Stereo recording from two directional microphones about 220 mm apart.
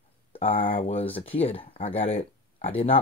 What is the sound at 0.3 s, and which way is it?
Speech, 25° left (ahead or behind).